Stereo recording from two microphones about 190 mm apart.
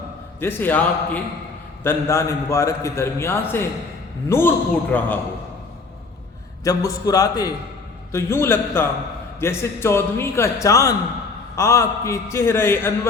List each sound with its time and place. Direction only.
0.3 s a man's voice: 10° left (ahead or behind)
6.7 s a man's voice: 20° left (ahead or behind)